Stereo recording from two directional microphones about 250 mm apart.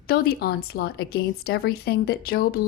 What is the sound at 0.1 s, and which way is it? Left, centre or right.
Speech, left.